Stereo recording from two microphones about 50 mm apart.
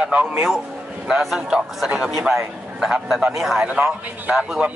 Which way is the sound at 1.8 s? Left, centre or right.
Centre.